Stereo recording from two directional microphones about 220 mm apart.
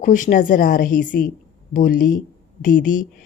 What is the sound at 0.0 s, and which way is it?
A woman's voice, 35° left (ahead or behind).